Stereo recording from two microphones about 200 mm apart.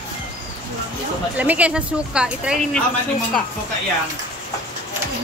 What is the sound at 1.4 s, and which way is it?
Speech, 5° right (ahead or behind).